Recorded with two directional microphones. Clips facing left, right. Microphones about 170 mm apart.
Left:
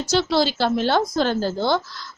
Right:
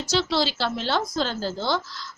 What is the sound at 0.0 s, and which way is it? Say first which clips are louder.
A woman's voice: left 4 dB; 50° left (ahead or behind).